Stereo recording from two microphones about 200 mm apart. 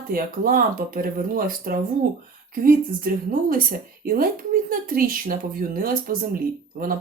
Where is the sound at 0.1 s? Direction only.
45° right (ahead or behind).